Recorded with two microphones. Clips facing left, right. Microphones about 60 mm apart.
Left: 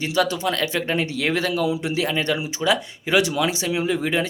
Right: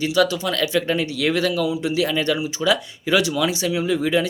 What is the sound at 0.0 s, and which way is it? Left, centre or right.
Speech, left.